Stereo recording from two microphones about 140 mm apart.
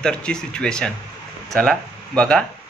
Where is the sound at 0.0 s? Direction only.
5° left (ahead or behind).